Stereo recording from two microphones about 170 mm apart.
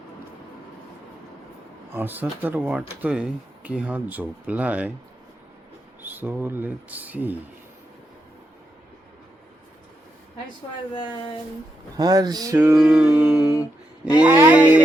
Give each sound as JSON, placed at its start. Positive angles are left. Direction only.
{"t": 1.9, "sound": "speech", "side_deg": -10}
{"t": 6.0, "sound": "speech", "side_deg": -10}
{"t": 10.9, "sound": "speech", "side_deg": 30}
{"t": 11.9, "sound": "speech", "side_deg": -25}